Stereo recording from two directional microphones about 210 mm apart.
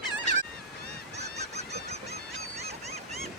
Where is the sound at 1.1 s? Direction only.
30° right (ahead or behind).